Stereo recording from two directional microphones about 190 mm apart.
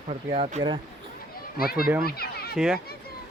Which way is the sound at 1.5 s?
50° left (ahead or behind).